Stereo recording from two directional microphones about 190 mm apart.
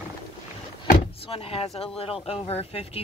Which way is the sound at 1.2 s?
30° left (ahead or behind).